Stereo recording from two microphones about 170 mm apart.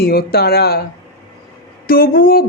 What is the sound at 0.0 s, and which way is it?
Speech, 65° left (ahead or behind).